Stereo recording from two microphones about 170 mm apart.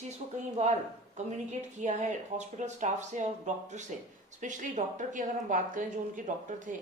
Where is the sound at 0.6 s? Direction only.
45° right (ahead or behind).